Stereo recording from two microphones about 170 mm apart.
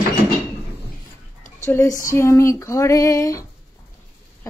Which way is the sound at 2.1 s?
15° left (ahead or behind).